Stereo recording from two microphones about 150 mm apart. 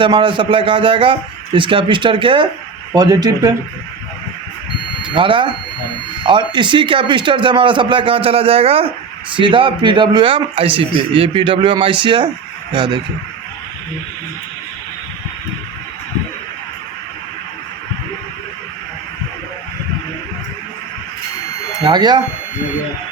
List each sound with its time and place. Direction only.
0.0 s speech: 35° right (ahead or behind)
5.0 s speech: 35° right (ahead or behind)
6.5 s speech: 30° right (ahead or behind)
21.8 s speech: 30° right (ahead or behind)